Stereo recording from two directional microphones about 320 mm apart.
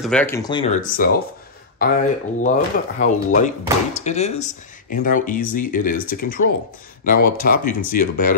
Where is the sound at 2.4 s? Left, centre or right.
Left.